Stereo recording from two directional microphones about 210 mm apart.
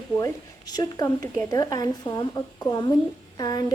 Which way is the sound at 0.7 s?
20° left (ahead or behind).